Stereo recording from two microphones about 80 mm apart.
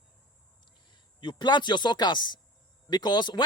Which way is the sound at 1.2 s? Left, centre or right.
Left.